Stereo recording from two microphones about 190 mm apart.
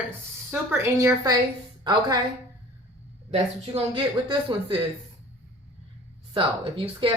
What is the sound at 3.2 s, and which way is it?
A woman's voice, 30° right (ahead or behind).